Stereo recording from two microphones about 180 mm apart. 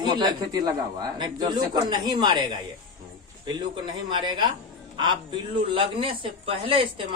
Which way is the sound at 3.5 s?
25° right (ahead or behind).